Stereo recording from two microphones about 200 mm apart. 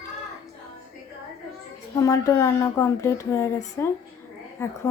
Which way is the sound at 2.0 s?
15° left (ahead or behind).